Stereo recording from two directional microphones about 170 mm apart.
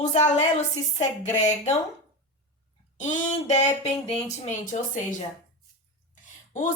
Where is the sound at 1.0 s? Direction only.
45° left (ahead or behind).